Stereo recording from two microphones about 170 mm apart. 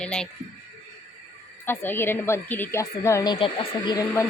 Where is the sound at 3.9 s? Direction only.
15° left (ahead or behind).